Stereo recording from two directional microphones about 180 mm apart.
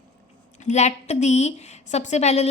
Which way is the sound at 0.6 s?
40° left (ahead or behind).